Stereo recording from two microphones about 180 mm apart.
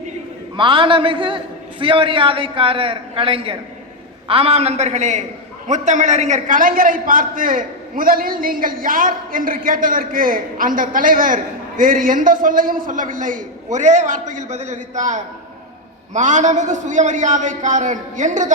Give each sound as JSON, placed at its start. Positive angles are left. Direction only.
{"t": 0.5, "sound": "a man's voice", "side_deg": -30}